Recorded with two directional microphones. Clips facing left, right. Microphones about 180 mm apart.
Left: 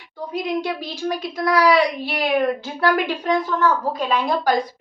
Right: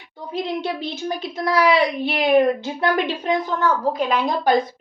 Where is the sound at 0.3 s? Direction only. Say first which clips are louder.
Left 1 dB; 25° right (ahead or behind).